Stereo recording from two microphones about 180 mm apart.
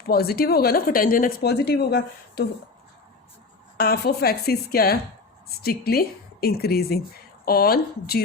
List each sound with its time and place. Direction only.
0.1 s a woman's voice: 60° left (ahead or behind)
3.8 s a woman's voice: 60° left (ahead or behind)